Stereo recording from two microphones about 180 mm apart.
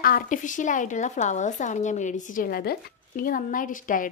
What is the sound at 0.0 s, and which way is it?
Speech, 50° left (ahead or behind).